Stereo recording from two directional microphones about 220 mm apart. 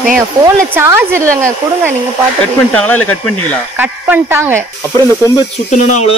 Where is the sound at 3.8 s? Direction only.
10° right (ahead or behind).